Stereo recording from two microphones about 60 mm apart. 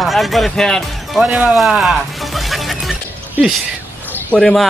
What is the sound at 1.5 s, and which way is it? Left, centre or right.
Music, centre.